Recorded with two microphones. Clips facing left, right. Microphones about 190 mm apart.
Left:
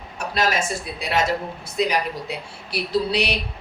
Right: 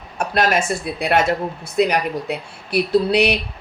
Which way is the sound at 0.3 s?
60° right (ahead or behind).